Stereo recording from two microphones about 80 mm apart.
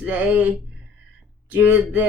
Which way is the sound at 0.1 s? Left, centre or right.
Centre.